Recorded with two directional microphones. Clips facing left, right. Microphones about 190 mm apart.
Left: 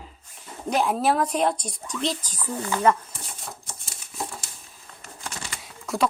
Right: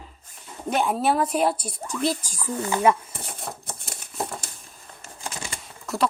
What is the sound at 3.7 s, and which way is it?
Crumpling, 60° right (ahead or behind).